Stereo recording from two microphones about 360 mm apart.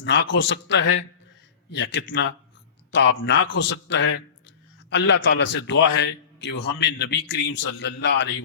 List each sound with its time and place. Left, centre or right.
0.0 s a man's voice: left